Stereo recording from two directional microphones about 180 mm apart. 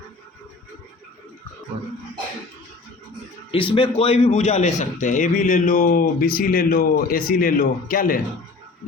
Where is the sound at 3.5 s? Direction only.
30° left (ahead or behind).